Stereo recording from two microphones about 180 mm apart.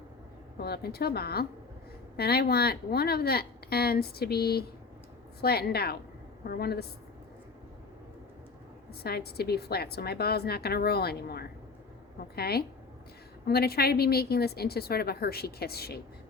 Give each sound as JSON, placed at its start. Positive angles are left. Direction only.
{"t": 0.6, "sound": "a woman's voice", "side_deg": 60}
{"t": 8.9, "sound": "a woman's voice", "side_deg": 60}